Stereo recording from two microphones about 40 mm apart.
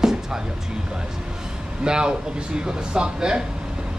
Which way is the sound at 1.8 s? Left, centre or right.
Right.